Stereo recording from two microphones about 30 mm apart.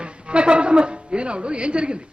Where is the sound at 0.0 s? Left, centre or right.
Right.